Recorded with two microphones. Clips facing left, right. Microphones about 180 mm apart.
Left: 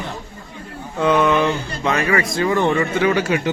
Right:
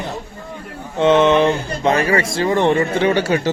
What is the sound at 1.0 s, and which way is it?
A man's voice, 25° right (ahead or behind).